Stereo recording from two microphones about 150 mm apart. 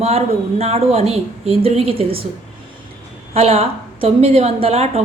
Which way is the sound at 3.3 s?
40° right (ahead or behind).